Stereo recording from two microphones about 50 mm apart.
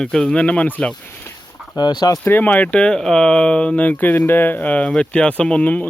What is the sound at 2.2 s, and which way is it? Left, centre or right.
Speech, left.